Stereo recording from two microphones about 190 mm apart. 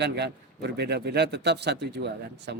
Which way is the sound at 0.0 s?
65° right (ahead or behind).